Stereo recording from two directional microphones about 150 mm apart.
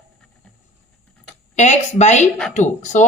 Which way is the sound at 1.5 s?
50° left (ahead or behind).